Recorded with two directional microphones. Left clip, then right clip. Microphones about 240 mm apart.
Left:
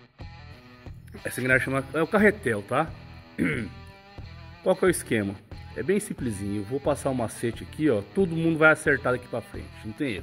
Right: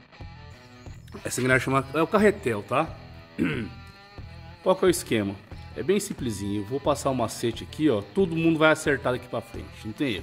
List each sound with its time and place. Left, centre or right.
1.2 s a man's voice: centre
2.0 s a man's voice: centre
4.6 s a man's voice: centre